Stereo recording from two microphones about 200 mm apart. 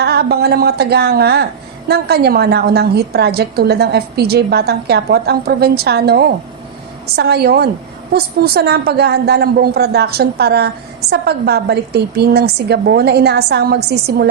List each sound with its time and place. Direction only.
0.0 s a woman's voice: 55° right (ahead or behind)